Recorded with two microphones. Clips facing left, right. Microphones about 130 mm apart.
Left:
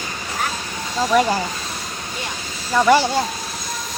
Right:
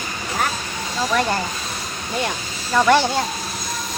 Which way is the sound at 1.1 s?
10° left (ahead or behind).